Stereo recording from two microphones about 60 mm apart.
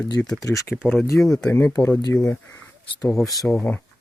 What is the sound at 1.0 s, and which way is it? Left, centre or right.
Speech, left.